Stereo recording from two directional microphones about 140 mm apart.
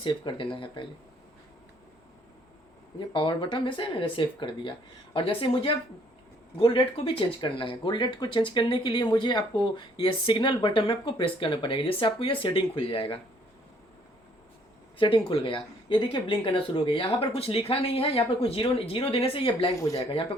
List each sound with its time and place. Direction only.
0.0 s speech: 35° left (ahead or behind)
3.1 s speech: 35° left (ahead or behind)
14.9 s speech: 40° left (ahead or behind)
19.7 s speech: 25° left (ahead or behind)